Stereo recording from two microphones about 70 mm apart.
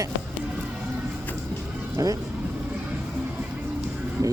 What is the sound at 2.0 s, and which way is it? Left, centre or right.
Speech, right.